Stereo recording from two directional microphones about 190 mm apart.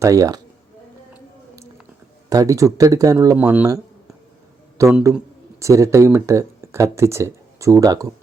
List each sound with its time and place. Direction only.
0.0 s speech: 15° right (ahead or behind)
2.3 s speech: 15° right (ahead or behind)
4.8 s speech: 10° right (ahead or behind)